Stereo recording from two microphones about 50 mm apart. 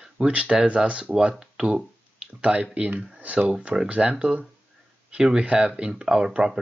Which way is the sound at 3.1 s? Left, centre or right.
Right.